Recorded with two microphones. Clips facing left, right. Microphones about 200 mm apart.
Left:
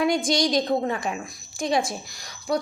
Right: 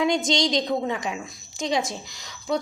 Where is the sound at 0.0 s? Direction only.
20° right (ahead or behind).